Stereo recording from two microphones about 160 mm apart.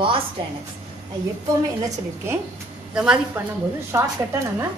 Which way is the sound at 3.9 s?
15° right (ahead or behind).